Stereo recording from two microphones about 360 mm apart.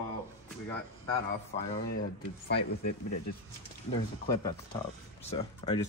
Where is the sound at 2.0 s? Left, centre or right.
Left.